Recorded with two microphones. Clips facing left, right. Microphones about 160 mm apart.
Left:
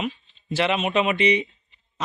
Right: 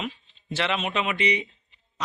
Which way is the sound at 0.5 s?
15° left (ahead or behind).